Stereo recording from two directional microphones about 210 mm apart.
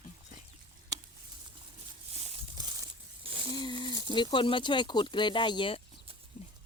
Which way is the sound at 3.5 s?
20° left (ahead or behind).